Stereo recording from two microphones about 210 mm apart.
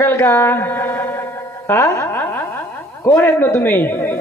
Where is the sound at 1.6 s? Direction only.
10° left (ahead or behind).